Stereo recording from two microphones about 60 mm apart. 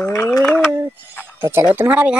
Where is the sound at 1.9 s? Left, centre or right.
Right.